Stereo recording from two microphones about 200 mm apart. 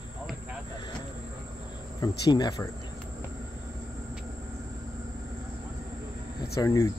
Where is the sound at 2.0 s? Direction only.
20° left (ahead or behind).